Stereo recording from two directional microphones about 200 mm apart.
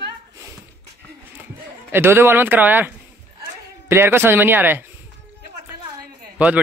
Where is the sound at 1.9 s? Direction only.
10° right (ahead or behind).